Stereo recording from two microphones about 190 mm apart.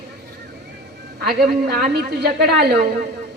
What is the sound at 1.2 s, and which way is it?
A woman's voice, 55° right (ahead or behind).